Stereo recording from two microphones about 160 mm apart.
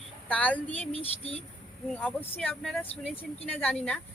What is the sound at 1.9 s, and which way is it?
Speech, 10° left (ahead or behind).